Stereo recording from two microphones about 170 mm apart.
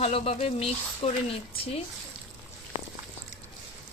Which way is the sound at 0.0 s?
35° left (ahead or behind).